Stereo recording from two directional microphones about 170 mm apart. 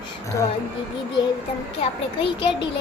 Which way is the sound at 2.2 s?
30° left (ahead or behind).